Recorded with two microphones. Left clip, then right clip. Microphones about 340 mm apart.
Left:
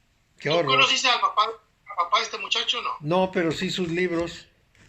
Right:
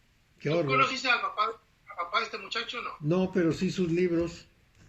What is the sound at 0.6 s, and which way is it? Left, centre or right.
Speech, centre.